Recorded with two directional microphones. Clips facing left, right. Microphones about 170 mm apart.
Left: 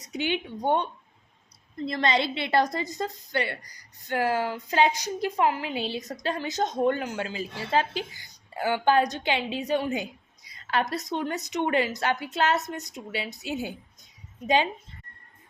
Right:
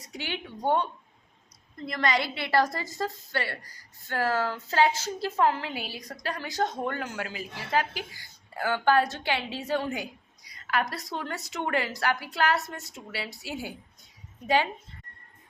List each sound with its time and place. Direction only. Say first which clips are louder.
0.0 s a woman's voice: left 7 dB; 20° left (ahead or behind)
1.9 s a woman's voice: left 2 dB; 25° left (ahead or behind)